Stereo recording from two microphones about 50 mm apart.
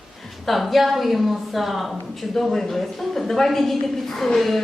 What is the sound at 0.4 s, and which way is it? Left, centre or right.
A woman's voice, centre.